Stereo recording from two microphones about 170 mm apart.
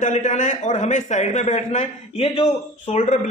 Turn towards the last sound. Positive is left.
turn(degrees=40)  # may be behind; listen again after turning